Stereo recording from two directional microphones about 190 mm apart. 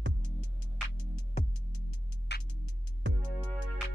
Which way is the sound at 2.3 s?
60° left (ahead or behind).